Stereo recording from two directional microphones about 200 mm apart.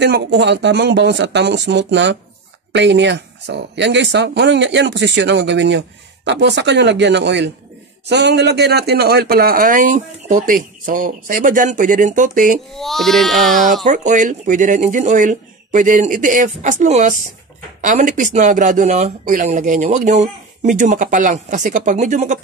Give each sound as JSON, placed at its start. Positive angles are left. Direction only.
{"t": 0.0, "sound": "speech", "side_deg": -60}
{"t": 12.7, "sound": "speech", "side_deg": 0}
{"t": 13.8, "sound": "speech", "side_deg": -40}